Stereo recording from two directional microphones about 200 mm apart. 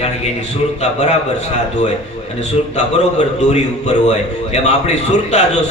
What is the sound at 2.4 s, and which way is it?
A man's voice, 35° left (ahead or behind).